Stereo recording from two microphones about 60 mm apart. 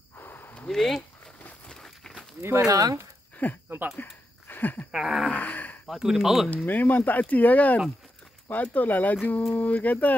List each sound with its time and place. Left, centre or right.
0.1 s a sound: left
0.7 s speech: centre
1.7 s a sound: centre
2.6 s speech: right
3.4 s speech: left
4.0 s a sound: left
4.9 s speech: centre
5.3 s speech: left
5.9 s speech: centre
6.5 s speech: left